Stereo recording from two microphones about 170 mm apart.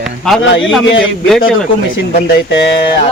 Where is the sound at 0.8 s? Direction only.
90° left.